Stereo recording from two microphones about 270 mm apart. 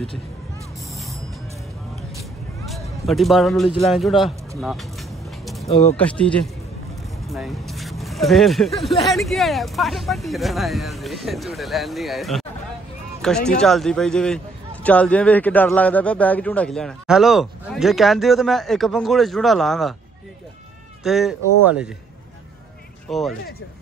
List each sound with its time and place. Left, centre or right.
2.6 s a man's voice: centre
5.4 s a sound: centre
5.7 s speech: left
5.9 s a man's voice: centre
21.0 s a man's voice: centre
23.0 s speech: centre